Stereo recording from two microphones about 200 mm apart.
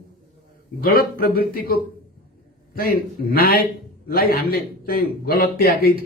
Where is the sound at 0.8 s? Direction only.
50° left (ahead or behind).